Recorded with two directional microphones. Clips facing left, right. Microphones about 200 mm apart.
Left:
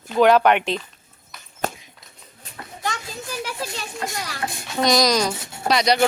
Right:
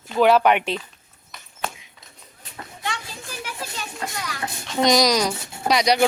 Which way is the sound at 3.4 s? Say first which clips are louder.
Left 3 dB; 35° left (ahead or behind).